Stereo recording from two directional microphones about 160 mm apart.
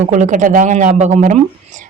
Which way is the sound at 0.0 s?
50° right (ahead or behind).